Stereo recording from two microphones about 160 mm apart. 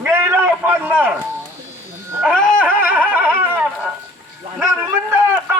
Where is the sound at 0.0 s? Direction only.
15° right (ahead or behind).